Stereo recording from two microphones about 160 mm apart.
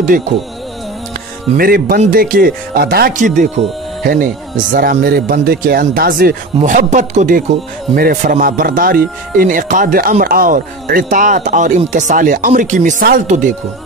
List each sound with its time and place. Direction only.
1.6 s a man's voice: 65° right (ahead or behind)
7.9 s a man's voice: 65° right (ahead or behind)